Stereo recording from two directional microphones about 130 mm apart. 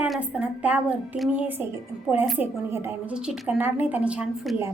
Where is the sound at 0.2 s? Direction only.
10° right (ahead or behind).